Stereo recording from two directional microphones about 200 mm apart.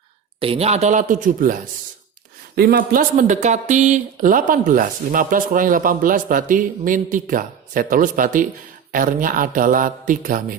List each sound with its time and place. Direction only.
0.3 s speech: 30° right (ahead or behind)
2.6 s speech: 50° right (ahead or behind)